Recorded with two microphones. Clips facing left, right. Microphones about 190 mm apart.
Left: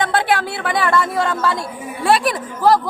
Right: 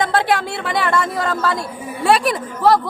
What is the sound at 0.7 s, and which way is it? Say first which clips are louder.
Speech: left 1 dB; centre (ahead or behind).